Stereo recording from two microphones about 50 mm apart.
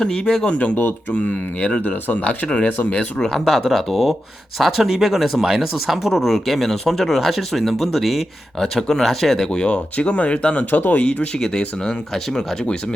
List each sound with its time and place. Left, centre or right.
0.0 s speech: centre
0.8 s speech: left
2.5 s speech: left
3.2 s speech: centre
9.6 s speech: left
11.3 s speech: centre